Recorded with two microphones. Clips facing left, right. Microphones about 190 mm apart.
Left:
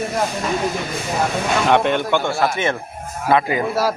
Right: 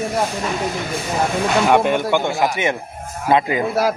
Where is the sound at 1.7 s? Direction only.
10° right (ahead or behind).